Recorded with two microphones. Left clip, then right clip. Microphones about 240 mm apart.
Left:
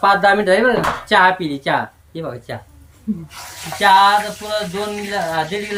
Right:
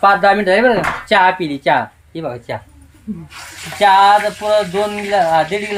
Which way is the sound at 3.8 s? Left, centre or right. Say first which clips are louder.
Right 2 dB; centre.